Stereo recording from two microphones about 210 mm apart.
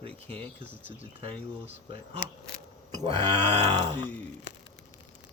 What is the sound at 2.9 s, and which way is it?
Speech, 25° right (ahead or behind).